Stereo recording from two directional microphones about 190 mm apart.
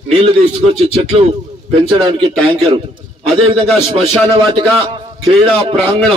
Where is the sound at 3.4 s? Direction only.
30° right (ahead or behind).